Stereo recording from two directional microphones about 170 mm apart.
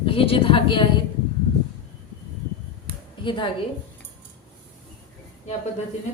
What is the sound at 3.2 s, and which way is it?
Speech, 30° left (ahead or behind).